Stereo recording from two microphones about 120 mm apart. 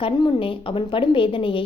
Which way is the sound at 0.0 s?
45° left (ahead or behind).